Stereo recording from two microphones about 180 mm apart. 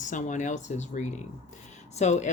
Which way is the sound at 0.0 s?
45° left (ahead or behind).